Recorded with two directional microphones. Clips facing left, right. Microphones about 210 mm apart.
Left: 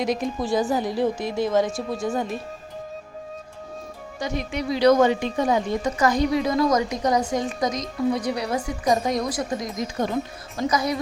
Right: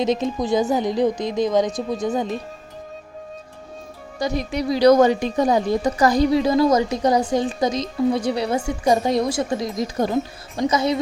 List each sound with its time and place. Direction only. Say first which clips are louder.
0.0 s speech: right 4 dB; 25° right (ahead or behind)
4.2 s a woman's voice: right 4 dB; 35° right (ahead or behind)